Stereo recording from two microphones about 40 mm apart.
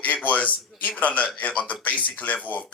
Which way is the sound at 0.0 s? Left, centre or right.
Left.